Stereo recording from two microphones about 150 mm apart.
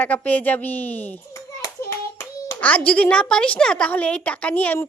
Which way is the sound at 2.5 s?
10° left (ahead or behind).